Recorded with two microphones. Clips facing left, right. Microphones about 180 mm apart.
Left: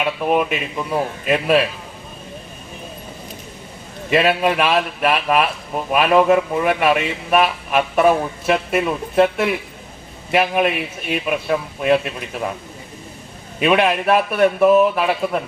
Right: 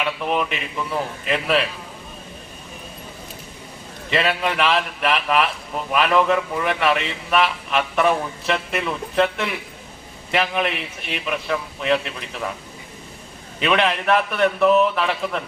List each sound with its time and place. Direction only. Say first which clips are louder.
0.0 s a man's voice: left 4 dB; 20° left (ahead or behind)
4.1 s a man's voice: left 5 dB; 20° left (ahead or behind)
13.6 s a man's voice: left 4 dB; 15° left (ahead or behind)